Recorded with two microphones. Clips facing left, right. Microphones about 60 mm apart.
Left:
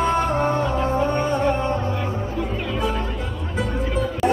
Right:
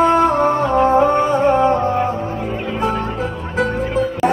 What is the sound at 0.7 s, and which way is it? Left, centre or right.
Music, right.